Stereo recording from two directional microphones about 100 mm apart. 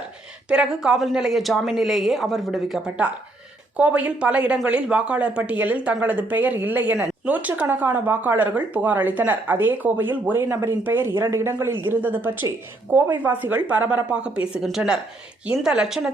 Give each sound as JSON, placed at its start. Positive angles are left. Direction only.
{"t": 0.4, "sound": "a woman's voice", "side_deg": -10}